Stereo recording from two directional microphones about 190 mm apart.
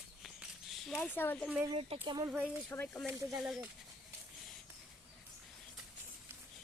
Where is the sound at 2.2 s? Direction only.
10° right (ahead or behind).